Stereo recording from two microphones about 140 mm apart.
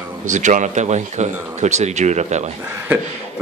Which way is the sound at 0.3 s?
60° right (ahead or behind).